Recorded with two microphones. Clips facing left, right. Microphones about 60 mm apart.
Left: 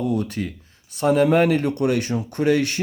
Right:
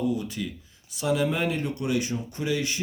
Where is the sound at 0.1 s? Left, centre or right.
Left.